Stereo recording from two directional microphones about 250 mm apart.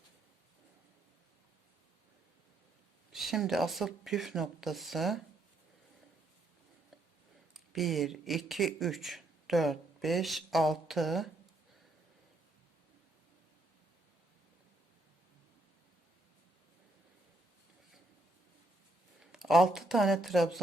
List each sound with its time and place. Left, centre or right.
3.1 s speech: centre
7.5 s speech: centre
19.2 s speech: centre